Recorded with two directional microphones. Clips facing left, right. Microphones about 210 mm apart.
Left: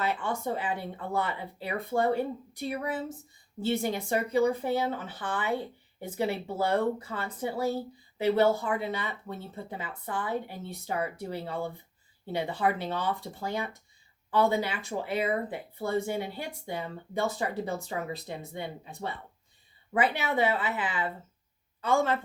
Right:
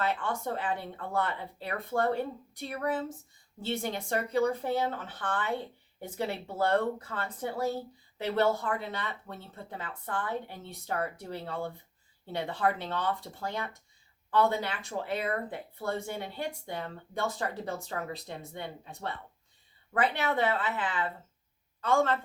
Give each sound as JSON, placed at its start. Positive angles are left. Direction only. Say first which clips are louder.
{"t": 0.0, "sound": "a woman's voice", "louder": "left 1 dB", "side_deg": 5}